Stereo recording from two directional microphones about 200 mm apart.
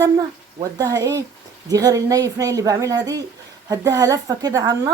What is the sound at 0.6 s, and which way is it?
A woman's voice, 20° right (ahead or behind).